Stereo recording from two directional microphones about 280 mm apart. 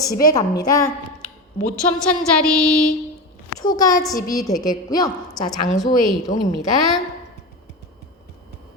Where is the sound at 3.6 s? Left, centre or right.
Centre.